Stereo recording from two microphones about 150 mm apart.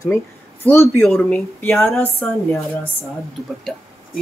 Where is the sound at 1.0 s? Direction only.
5° left (ahead or behind).